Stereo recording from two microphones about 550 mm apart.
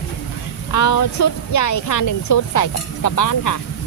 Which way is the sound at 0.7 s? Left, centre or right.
Left.